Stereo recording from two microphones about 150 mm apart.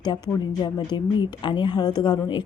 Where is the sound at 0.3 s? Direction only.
30° left (ahead or behind).